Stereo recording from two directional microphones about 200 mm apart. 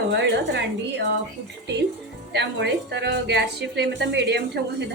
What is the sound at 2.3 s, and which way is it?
A woman's voice, 55° right (ahead or behind).